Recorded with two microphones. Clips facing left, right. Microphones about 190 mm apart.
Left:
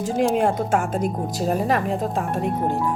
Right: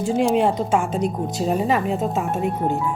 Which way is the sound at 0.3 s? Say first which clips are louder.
Right 1 dB; 50° left (ahead or behind).